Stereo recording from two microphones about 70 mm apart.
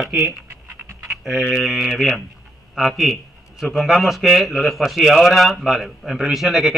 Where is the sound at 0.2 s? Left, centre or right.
Right.